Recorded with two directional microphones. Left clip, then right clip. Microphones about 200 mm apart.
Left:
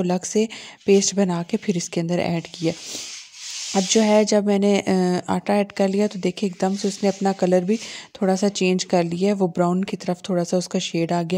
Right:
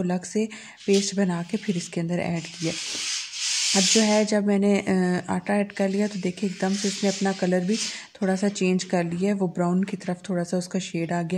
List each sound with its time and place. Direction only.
0.0 s speech: 35° left (ahead or behind)
3.7 s speech: 35° left (ahead or behind)